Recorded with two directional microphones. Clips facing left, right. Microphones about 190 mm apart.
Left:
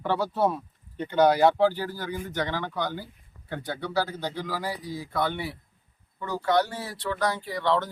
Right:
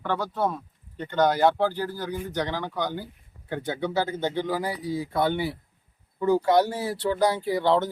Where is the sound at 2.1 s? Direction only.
15° right (ahead or behind).